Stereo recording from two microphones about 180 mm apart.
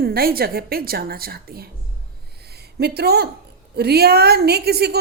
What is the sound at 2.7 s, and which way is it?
A woman's voice, 65° right (ahead or behind).